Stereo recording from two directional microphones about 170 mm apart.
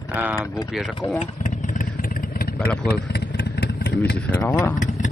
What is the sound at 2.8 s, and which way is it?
Vehicle, 70° left (ahead or behind).